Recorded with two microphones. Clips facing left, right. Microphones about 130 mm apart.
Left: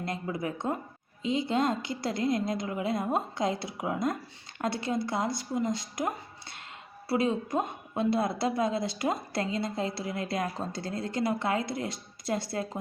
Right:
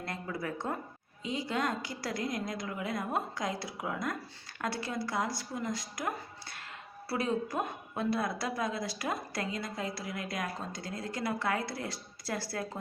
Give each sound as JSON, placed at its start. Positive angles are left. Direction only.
{"t": 0.0, "sound": "a woman's voice", "side_deg": 20}